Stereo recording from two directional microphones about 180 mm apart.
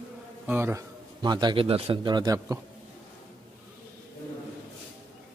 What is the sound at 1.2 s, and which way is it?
A man's voice, 25° right (ahead or behind).